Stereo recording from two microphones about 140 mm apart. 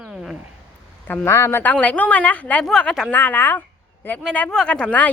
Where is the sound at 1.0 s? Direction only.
15° left (ahead or behind).